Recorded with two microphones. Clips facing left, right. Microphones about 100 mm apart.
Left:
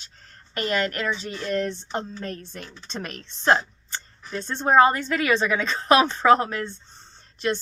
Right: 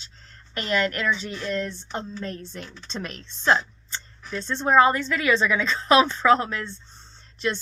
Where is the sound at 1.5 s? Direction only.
60° left (ahead or behind).